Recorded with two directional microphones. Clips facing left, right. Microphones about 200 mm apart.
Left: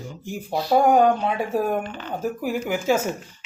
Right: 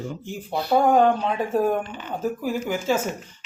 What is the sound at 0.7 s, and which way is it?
Speech, 10° left (ahead or behind).